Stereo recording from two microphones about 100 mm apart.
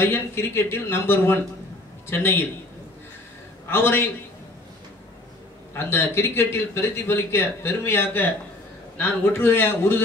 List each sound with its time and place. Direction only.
0.0 s a man's voice: 25° left (ahead or behind)
3.7 s a man's voice: 20° left (ahead or behind)
5.8 s a man's voice: 25° left (ahead or behind)